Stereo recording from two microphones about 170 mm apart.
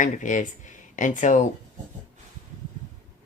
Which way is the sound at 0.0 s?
50° left (ahead or behind).